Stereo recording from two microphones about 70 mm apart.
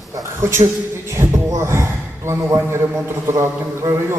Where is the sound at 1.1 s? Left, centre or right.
Right.